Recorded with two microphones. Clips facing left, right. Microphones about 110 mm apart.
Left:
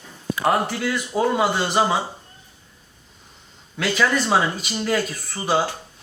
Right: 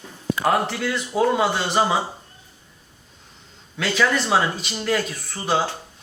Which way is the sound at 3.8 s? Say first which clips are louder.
Even; centre (ahead or behind).